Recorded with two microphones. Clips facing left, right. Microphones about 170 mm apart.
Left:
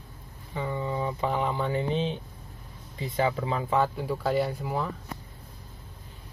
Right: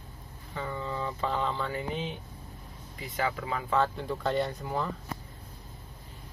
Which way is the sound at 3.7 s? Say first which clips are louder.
Left 1 dB; 10° left (ahead or behind).